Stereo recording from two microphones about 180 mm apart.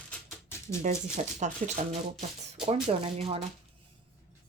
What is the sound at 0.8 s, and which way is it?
Speech, 40° right (ahead or behind).